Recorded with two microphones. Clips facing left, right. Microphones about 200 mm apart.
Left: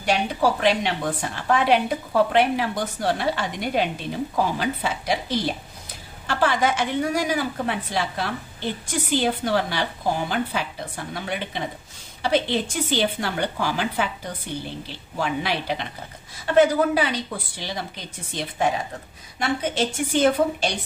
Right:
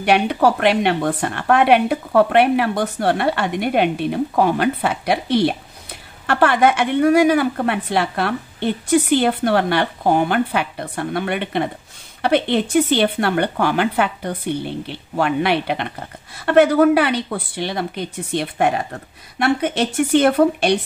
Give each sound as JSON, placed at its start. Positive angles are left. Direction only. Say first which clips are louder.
{"t": 0.0, "sound": "a woman's voice", "louder": "right 6 dB", "side_deg": -65}